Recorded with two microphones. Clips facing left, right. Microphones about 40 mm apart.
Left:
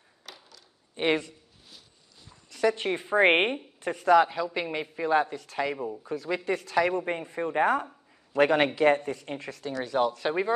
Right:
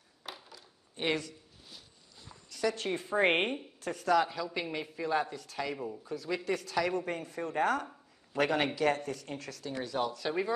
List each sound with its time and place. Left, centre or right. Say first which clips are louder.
0.2 s a sound: right 2 dB; centre
0.9 s speech: left 6 dB; left
2.5 s speech: left 6 dB; left
5.8 s speech: left 5 dB; centre
6.0 s speech: left 4 dB; left